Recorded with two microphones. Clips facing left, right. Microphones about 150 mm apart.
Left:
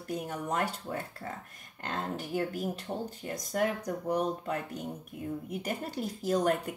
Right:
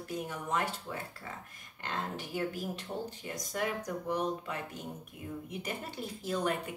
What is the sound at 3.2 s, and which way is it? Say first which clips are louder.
Speech: left 6 dB; 40° left (ahead or behind).